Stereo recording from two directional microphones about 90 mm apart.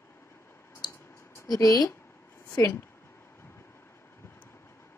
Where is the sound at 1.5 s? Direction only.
45° left (ahead or behind).